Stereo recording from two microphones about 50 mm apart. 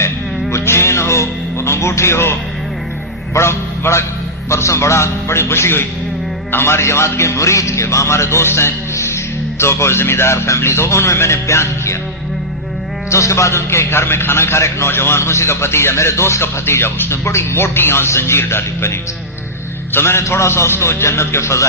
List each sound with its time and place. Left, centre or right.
0.5 s music: left
3.3 s a man's voice: left
9.0 s a man's voice: left
13.1 s a man's voice: left